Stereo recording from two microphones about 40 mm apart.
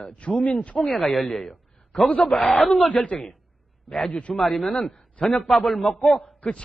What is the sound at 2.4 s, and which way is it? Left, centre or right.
Speech, centre.